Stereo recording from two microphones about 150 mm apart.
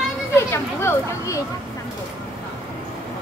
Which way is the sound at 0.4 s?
15° left (ahead or behind).